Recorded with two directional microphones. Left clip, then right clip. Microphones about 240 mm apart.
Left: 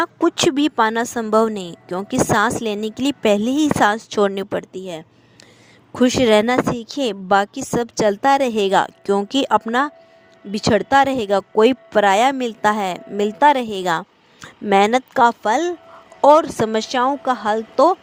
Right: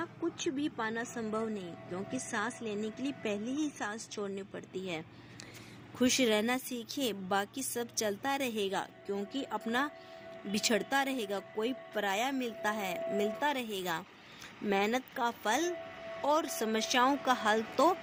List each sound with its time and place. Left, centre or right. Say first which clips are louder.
0.0 s a woman's voice: left 19 dB; left